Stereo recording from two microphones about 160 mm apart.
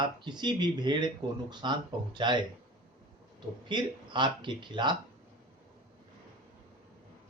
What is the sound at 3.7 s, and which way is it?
Speech, 30° right (ahead or behind).